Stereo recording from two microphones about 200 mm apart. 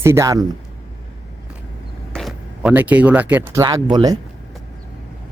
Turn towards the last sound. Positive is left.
turn(degrees=-20)  # may be behind; listen again after turning